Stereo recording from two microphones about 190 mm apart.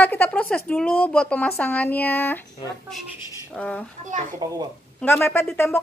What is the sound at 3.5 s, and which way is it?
Speech, 5° left (ahead or behind).